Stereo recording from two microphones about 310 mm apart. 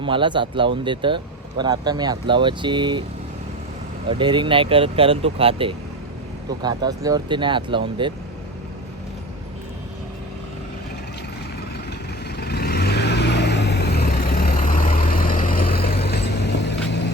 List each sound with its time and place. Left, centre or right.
0.0 s speech: centre
4.1 s speech: centre
12.4 s vehicle: left